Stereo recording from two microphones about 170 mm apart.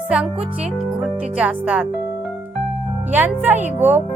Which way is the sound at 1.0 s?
10° right (ahead or behind).